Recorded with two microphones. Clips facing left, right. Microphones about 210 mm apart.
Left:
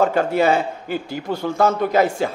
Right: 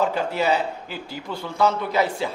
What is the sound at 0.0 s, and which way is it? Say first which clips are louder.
A man's voice: left 5 dB; 50° left (ahead or behind).